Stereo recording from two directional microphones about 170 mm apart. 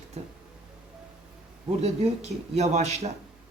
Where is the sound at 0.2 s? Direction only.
40° right (ahead or behind).